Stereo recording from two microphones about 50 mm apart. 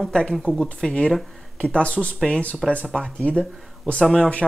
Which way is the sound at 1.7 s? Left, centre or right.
Left.